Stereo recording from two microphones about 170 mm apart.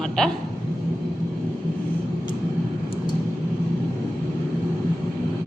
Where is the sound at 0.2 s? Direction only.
5° left (ahead or behind).